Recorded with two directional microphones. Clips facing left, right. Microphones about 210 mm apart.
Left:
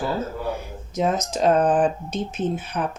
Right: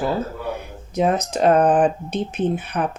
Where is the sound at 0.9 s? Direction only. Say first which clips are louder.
Right 3 dB; 60° right (ahead or behind).